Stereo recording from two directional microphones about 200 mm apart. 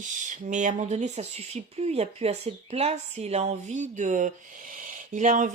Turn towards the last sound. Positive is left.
turn(degrees=-40)  # may be behind; listen again after turning